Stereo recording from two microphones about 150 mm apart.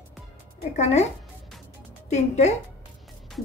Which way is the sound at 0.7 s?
50° left (ahead or behind).